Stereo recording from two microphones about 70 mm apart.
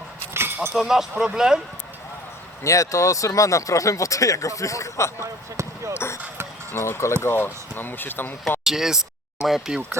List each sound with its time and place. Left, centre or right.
0.3 s keys jangling: right
0.8 s speech: centre
2.6 s speech: left
5.2 s speech: right
5.9 s speech: left
8.6 s speech: centre